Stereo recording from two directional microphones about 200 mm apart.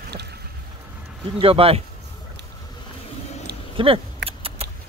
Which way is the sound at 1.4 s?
30° right (ahead or behind).